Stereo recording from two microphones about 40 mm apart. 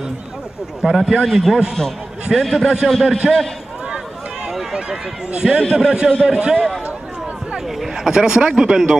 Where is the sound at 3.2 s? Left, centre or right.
Centre.